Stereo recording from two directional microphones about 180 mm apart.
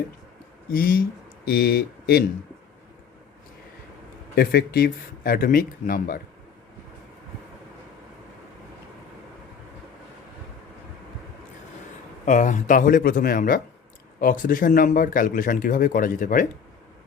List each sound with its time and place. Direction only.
0.7 s speech: 55° left (ahead or behind)
4.4 s speech: 60° left (ahead or behind)
12.2 s speech: 45° left (ahead or behind)